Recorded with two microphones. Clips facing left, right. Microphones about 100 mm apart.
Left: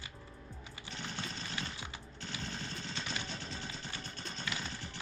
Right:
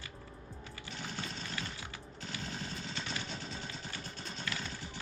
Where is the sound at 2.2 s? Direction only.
Centre (ahead or behind).